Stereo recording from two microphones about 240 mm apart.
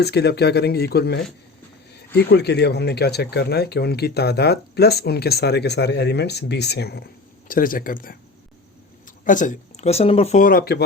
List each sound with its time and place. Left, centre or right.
0.0 s speech: left